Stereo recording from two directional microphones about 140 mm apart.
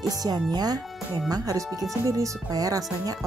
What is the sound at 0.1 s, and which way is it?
Speech, 30° right (ahead or behind).